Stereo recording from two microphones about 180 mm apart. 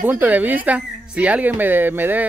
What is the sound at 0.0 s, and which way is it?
Speech, 10° right (ahead or behind).